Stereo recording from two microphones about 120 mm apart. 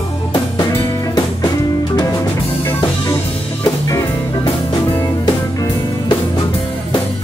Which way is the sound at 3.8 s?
35° left (ahead or behind).